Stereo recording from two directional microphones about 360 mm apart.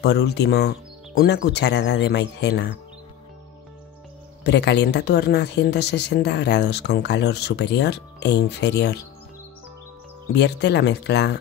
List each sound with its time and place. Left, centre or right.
0.0 s speech: left
4.5 s speech: left
10.3 s speech: left